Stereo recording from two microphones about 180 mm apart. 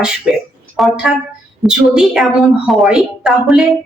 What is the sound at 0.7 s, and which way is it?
A woman's voice, centre (ahead or behind).